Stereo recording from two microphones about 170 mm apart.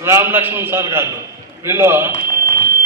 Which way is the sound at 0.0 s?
15° right (ahead or behind).